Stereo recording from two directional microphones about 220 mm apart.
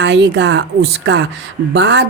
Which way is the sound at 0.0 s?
50° right (ahead or behind).